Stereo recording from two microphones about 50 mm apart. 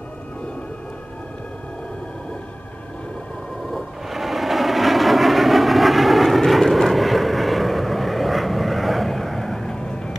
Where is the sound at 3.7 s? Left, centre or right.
Centre.